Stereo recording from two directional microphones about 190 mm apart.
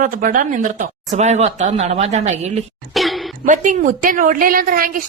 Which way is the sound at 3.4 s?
40° right (ahead or behind).